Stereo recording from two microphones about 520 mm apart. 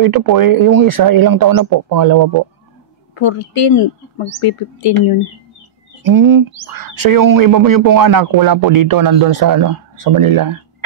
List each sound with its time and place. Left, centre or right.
0.0 s speech: right
3.2 s speech: left
6.0 s speech: right